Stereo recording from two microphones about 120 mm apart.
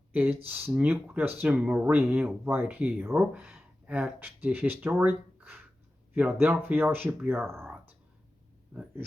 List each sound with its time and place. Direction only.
0.1 s speech: 10° right (ahead or behind)
8.7 s speech: 15° right (ahead or behind)